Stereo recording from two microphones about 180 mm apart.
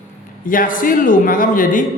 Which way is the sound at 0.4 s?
50° left (ahead or behind).